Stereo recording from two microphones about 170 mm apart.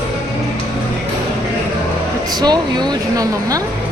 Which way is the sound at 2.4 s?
25° right (ahead or behind).